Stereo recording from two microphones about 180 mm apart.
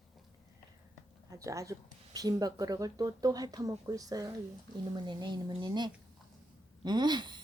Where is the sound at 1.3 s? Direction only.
15° right (ahead or behind).